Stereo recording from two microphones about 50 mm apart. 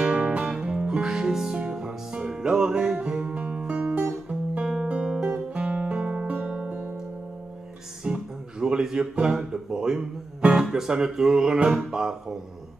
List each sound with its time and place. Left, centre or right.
0.0 s music: centre
4.8 s guitar: right
8.0 s music: centre
9.2 s speech: centre